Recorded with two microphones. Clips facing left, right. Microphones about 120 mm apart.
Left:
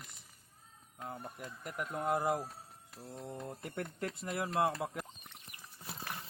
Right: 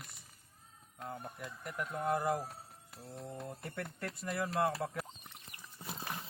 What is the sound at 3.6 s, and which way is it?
Speech, 20° left (ahead or behind).